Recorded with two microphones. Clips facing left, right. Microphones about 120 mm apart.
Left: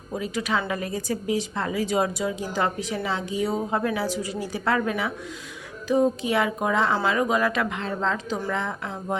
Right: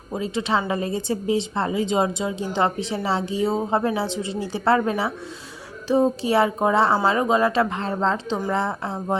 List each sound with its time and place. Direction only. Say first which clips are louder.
0.1 s a woman's voice: right 3 dB; 25° right (ahead or behind)